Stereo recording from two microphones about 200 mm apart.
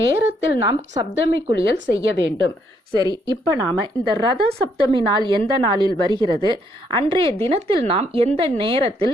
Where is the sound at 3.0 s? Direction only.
20° right (ahead or behind).